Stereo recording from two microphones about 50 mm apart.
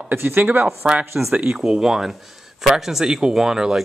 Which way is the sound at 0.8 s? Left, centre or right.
Right.